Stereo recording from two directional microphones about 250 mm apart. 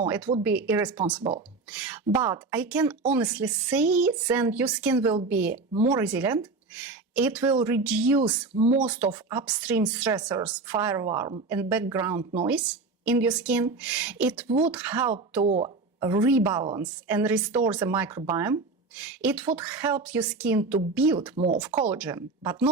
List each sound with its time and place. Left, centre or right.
0.0 s speech: centre
2.1 s a woman's voice: centre
2.5 s speech: centre
8.5 s speech: right
8.8 s a woman's voice: centre
15.4 s speech: right
16.0 s speech: centre
21.4 s speech: right
21.8 s speech: centre